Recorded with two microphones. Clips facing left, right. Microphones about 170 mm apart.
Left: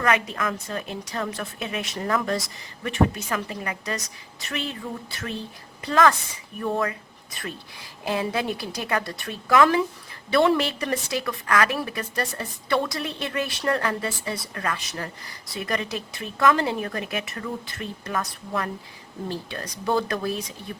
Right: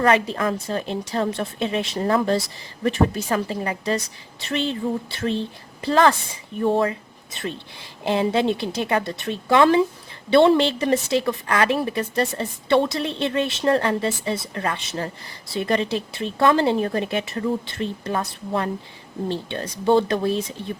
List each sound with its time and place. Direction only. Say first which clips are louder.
0.0 s a woman's voice: right 5 dB; 30° right (ahead or behind)